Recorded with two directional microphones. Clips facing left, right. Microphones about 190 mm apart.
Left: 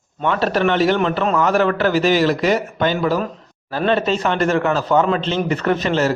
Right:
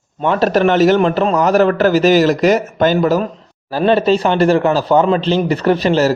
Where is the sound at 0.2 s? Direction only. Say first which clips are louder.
Right 5 dB; 40° right (ahead or behind).